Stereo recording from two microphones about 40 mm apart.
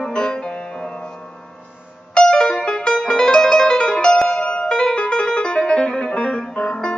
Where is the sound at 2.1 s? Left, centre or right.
Left.